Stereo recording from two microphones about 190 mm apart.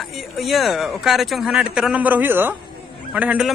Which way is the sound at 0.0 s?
Centre (ahead or behind).